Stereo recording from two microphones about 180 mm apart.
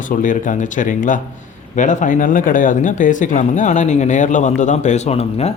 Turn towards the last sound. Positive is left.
turn(degrees=35)  # may be behind; listen again after turning